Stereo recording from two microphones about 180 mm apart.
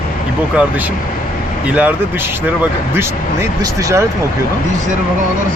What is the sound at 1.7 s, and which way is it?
Speech, 5° right (ahead or behind).